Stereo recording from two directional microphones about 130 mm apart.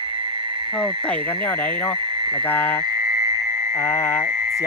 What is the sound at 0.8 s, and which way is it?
Speech, 10° left (ahead or behind).